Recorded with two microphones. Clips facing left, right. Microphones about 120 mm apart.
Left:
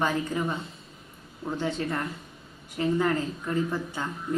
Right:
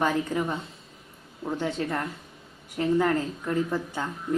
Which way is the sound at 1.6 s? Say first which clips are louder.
Even; 50° right (ahead or behind).